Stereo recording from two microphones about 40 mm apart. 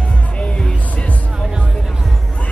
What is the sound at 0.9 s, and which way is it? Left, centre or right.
Music, left.